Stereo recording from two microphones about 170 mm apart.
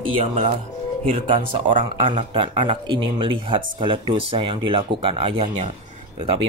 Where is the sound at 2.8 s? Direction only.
30° right (ahead or behind).